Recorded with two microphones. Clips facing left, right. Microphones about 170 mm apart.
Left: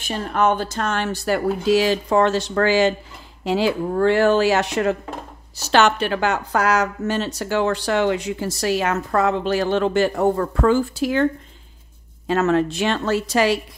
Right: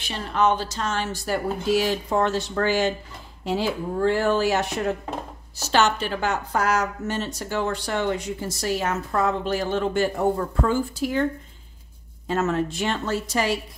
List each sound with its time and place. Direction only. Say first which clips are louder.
0.0 s speech: left 2 dB; 50° left (ahead or behind); by 4.9 s 90° left
5.7 s speech: left 4 dB; 65° left (ahead or behind); by 11.2 s 85° left
12.3 s speech: left 5 dB; 85° left